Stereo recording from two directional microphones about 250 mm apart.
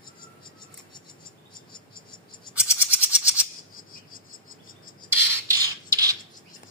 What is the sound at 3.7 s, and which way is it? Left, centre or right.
Cricket, left.